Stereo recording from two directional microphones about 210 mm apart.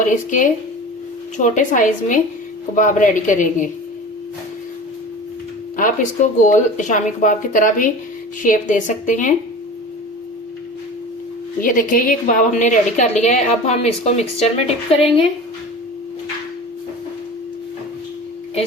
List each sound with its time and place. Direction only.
0.0 s a woman's voice: 40° left (ahead or behind)
5.7 s a woman's voice: 40° left (ahead or behind)
11.6 s a woman's voice: 40° left (ahead or behind)